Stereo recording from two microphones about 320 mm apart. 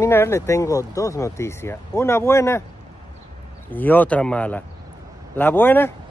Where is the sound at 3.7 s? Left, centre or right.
Centre.